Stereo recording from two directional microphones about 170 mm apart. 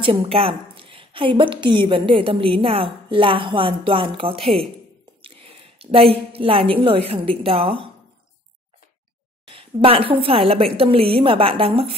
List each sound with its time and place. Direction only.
0.0 s a woman's voice: 30° right (ahead or behind)
9.5 s a woman's voice: 30° right (ahead or behind)